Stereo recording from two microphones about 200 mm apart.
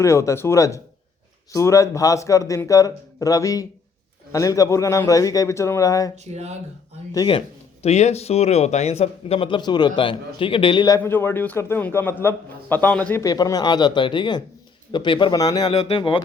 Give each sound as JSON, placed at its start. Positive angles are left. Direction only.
{"t": 0.0, "sound": "speech", "side_deg": 15}
{"t": 6.3, "sound": "speech", "side_deg": -30}
{"t": 7.1, "sound": "speech", "side_deg": 20}